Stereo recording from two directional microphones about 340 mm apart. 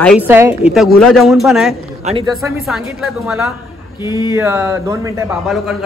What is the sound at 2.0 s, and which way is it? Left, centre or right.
Speech, centre.